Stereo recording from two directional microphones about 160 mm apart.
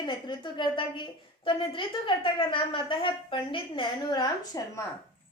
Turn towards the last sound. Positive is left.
turn(degrees=20)  # may be behind; listen again after turning